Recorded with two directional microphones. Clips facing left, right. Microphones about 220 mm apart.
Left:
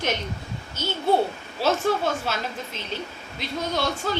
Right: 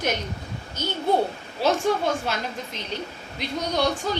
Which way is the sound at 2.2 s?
15° right (ahead or behind).